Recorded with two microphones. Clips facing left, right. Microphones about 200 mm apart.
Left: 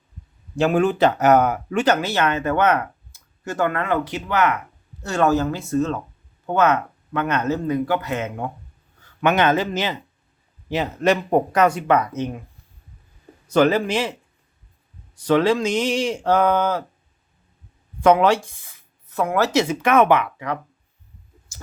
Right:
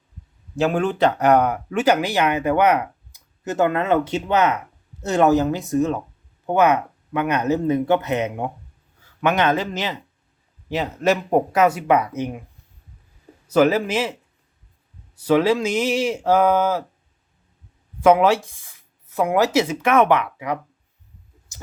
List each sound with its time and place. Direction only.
0.5 s speech: centre (ahead or behind)
1.8 s speech: 10° right (ahead or behind)
9.0 s speech: 5° right (ahead or behind)
13.5 s speech: 5° right (ahead or behind)
18.0 s speech: 5° right (ahead or behind)
19.1 s speech: 15° right (ahead or behind); by 20.3 s centre (ahead or behind)
21.5 s a sound: 20° right (ahead or behind)